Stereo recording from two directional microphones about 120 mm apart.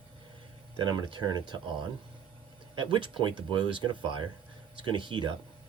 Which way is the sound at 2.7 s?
45° right (ahead or behind).